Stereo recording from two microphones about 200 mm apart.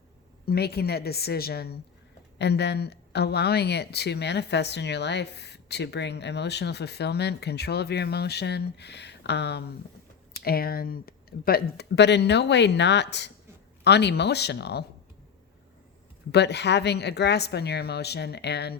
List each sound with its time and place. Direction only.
0.4 s a woman's voice: 50° left (ahead or behind)
16.3 s speech: 55° left (ahead or behind)